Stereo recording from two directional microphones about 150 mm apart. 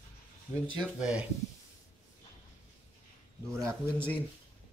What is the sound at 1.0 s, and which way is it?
Speech, 5° right (ahead or behind).